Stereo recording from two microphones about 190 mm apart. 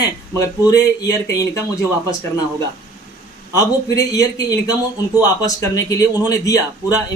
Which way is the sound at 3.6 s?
20° left (ahead or behind).